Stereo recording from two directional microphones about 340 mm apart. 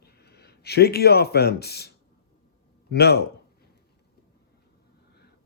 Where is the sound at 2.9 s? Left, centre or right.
Left.